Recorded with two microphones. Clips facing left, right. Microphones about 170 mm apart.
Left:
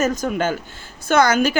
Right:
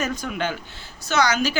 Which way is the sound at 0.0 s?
45° left (ahead or behind).